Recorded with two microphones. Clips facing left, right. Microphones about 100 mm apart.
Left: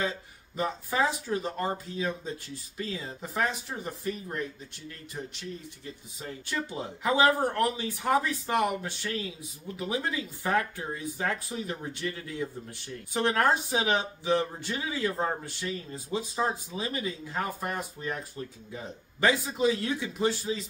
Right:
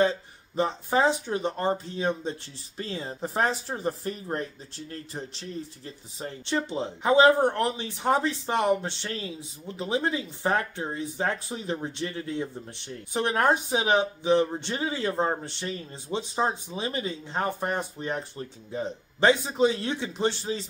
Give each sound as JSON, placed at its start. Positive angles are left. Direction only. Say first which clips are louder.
{"t": 0.6, "sound": "speech", "louder": "right 4 dB", "side_deg": -30}